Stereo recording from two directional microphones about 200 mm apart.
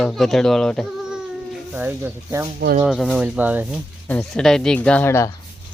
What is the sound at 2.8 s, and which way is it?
Speech, centre (ahead or behind).